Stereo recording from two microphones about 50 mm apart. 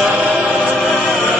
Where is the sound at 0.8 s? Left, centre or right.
Centre.